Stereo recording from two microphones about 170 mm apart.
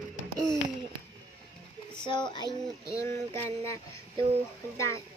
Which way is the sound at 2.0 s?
25° left (ahead or behind).